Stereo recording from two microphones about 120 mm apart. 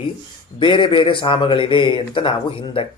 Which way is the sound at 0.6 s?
45° left (ahead or behind).